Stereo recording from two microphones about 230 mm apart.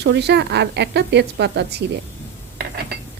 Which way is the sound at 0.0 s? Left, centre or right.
Right.